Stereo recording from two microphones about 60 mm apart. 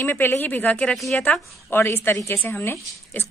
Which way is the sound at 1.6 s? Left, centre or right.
Left.